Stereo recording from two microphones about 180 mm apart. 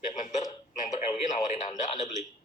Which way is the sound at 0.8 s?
40° left (ahead or behind).